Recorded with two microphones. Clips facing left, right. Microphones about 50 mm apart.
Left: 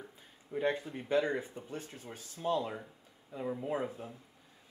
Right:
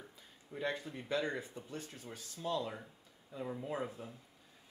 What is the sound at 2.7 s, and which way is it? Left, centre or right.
Speech, centre.